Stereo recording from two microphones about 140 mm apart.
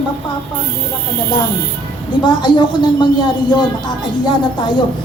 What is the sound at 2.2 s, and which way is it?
A woman's voice, 35° left (ahead or behind).